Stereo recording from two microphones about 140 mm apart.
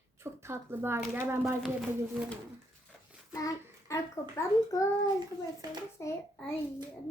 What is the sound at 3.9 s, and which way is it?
Speech, 20° left (ahead or behind).